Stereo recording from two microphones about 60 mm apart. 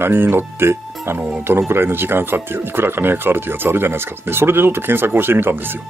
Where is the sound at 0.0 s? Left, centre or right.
Right.